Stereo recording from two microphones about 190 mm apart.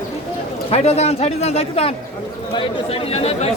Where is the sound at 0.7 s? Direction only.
35° left (ahead or behind).